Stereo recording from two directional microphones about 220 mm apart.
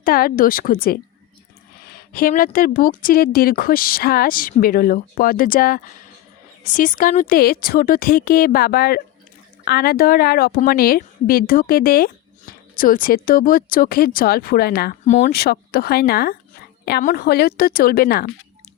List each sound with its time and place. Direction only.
0.0 s a woman's voice: 40° left (ahead or behind)